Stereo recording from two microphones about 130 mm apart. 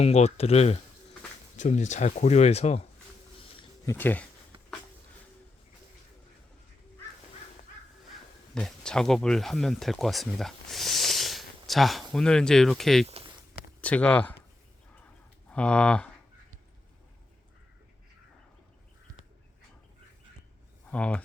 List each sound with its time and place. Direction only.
0.0 s speech: 55° left (ahead or behind)
1.5 s speech: 65° left (ahead or behind)
3.8 s speech: 15° left (ahead or behind)
8.5 s speech: 5° left (ahead or behind)
15.4 s speech: 10° left (ahead or behind)
20.9 s speech: 10° left (ahead or behind)